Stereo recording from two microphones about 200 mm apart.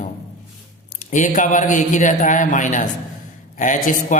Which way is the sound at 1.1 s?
40° left (ahead or behind).